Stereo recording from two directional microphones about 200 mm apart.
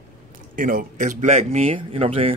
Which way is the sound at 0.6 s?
45° right (ahead or behind).